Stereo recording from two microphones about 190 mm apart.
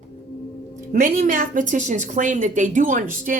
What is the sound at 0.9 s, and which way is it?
A woman's voice, 45° right (ahead or behind).